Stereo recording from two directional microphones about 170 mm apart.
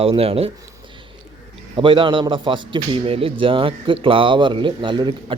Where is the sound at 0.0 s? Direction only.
35° right (ahead or behind).